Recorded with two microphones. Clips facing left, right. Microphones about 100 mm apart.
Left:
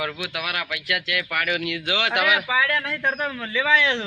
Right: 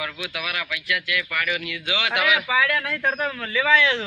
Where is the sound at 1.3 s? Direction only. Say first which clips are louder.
Left 2 dB; 55° left (ahead or behind).